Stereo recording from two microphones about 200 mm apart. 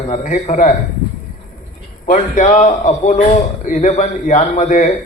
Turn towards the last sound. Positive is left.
turn(degrees=35)  # may be behind; listen again after turning